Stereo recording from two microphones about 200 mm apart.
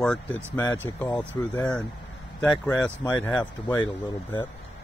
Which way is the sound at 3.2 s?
5° left (ahead or behind).